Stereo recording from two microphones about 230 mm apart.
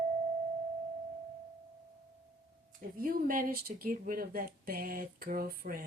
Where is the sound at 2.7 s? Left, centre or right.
Right.